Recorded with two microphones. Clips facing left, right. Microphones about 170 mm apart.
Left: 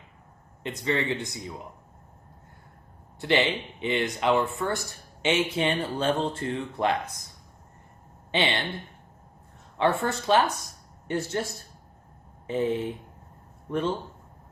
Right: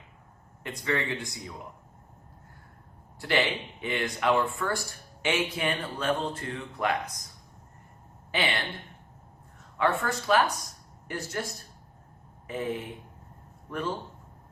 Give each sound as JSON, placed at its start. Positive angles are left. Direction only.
{"t": 0.6, "sound": "speech", "side_deg": 25}
{"t": 3.2, "sound": "speech", "side_deg": 20}
{"t": 8.3, "sound": "speech", "side_deg": 25}
{"t": 9.7, "sound": "speech", "side_deg": 30}